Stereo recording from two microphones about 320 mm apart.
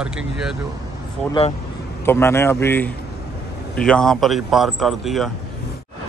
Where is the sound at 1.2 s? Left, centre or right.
Centre.